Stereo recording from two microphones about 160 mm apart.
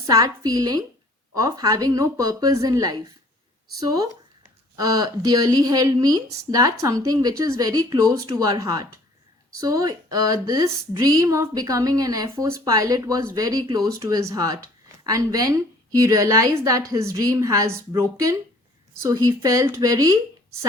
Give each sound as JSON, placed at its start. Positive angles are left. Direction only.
{"t": 0.1, "sound": "speech", "side_deg": -20}